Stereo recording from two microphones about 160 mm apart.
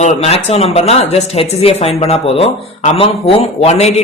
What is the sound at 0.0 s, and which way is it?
Speech, 45° left (ahead or behind).